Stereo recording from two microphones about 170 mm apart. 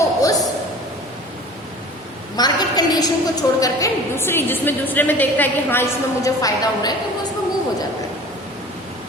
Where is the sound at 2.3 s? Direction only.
25° left (ahead or behind).